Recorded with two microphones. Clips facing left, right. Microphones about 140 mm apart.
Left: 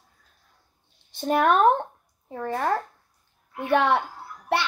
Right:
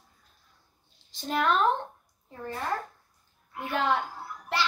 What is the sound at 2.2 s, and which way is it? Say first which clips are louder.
A woman's voice: left 7 dB; 65° left (ahead or behind).